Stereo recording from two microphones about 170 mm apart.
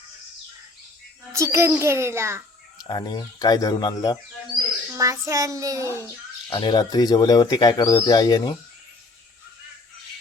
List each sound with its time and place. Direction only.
1.3 s a child's voice: 15° right (ahead or behind)
2.7 s speech: 25° left (ahead or behind)
4.9 s a child's voice: 20° right (ahead or behind)
6.5 s speech: 30° left (ahead or behind)